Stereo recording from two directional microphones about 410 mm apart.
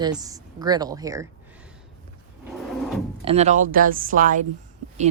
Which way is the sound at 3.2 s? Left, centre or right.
Centre.